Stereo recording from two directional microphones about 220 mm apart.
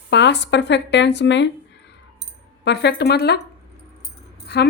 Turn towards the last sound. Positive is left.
turn(degrees=50)  # may be behind; listen again after turning